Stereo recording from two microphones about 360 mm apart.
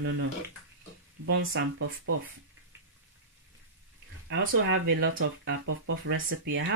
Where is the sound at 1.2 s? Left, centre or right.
Right.